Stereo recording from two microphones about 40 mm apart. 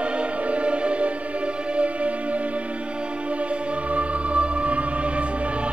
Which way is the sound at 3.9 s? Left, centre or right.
Right.